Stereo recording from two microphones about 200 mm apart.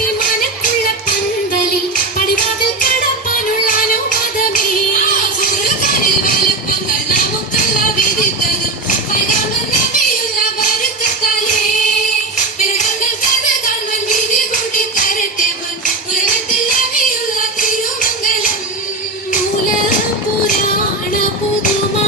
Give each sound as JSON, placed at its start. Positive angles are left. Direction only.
{"t": 0.2, "sound": "music", "side_deg": 45}
{"t": 2.8, "sound": "music", "side_deg": 45}
{"t": 14.5, "sound": "music", "side_deg": 40}
{"t": 17.3, "sound": "music", "side_deg": 45}